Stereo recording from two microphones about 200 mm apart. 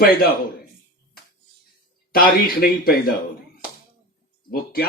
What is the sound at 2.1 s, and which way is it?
Speech, 50° left (ahead or behind).